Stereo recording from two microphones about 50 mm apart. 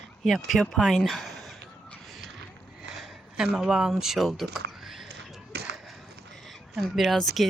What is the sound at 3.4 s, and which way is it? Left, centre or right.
Speech, centre.